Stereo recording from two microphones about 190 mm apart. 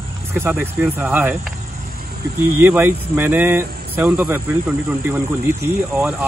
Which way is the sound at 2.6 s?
10° right (ahead or behind).